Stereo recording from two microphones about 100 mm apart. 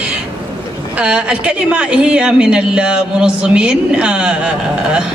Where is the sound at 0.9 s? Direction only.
10° right (ahead or behind).